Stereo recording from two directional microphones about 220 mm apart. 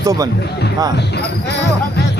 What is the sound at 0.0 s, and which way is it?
Speech, 15° right (ahead or behind).